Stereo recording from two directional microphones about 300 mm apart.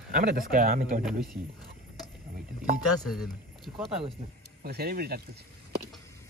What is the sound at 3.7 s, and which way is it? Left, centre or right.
Speech, centre.